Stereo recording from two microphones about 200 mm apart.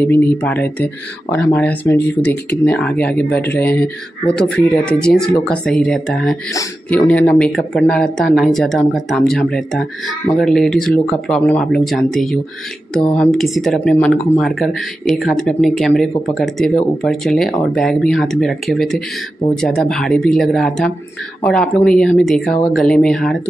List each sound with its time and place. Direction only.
0.0 s speech: 10° left (ahead or behind)